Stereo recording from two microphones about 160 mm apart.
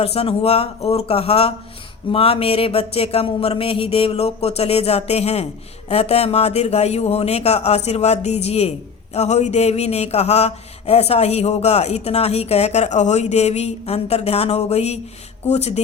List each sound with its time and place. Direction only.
0.0 s mantra: 40° left (ahead or behind)
15.4 s speech: 45° left (ahead or behind)